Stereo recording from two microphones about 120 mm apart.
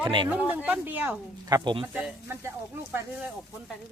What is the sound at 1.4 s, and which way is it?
Speech, 35° right (ahead or behind).